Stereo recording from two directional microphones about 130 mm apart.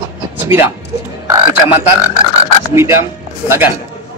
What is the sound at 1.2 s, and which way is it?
A man's voice, 25° right (ahead or behind).